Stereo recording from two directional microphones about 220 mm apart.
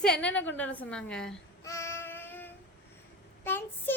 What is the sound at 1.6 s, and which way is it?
Child singing, 15° left (ahead or behind).